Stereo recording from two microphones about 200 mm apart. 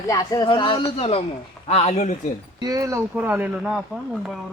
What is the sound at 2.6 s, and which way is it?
Speech, 15° right (ahead or behind).